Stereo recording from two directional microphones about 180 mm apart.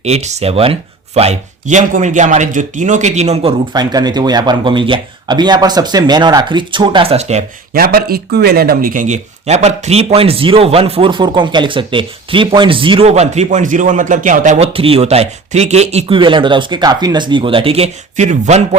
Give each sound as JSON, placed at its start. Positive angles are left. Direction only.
{"t": 0.0, "sound": "speech", "side_deg": -40}
{"t": 7.7, "sound": "speech", "side_deg": -55}